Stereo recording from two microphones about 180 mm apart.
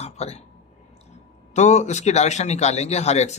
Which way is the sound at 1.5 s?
40° left (ahead or behind).